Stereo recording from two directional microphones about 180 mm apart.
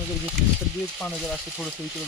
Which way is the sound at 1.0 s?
10° left (ahead or behind).